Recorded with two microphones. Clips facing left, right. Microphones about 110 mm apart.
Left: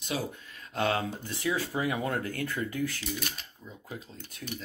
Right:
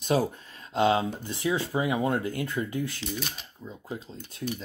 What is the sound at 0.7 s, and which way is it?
Speech, 20° right (ahead or behind).